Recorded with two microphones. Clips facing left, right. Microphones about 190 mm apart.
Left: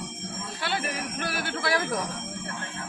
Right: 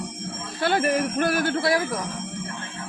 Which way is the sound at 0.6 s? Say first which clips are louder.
Right 10 dB; 45° right (ahead or behind).